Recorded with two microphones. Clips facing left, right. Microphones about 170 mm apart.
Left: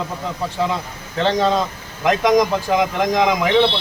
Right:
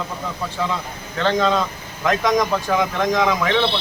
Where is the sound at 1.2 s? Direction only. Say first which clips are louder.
Left 1 dB; 20° left (ahead or behind).